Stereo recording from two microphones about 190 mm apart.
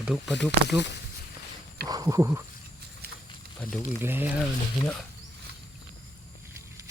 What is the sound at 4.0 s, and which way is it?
Speech, 10° right (ahead or behind).